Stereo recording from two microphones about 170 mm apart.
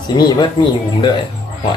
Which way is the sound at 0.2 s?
25° left (ahead or behind).